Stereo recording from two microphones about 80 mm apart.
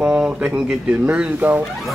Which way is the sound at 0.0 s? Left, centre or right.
Centre.